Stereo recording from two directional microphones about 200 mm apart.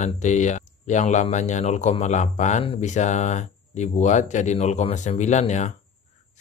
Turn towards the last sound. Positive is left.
turn(degrees=35)  # may be behind; listen again after turning